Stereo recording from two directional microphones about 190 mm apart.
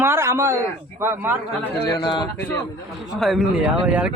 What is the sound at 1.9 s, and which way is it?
Speech, 20° left (ahead or behind).